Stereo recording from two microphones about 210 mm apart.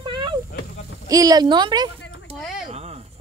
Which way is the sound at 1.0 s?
15° right (ahead or behind).